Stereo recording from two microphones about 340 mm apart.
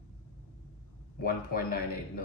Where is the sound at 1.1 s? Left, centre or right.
Left.